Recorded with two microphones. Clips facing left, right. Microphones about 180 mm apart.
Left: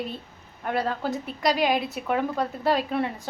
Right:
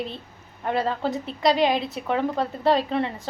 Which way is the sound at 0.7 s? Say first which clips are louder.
Right 2 dB; centre (ahead or behind).